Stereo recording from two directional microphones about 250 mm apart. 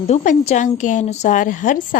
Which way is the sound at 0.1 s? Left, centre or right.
Left.